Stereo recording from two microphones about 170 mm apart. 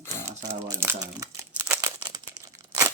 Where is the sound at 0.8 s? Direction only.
15° right (ahead or behind).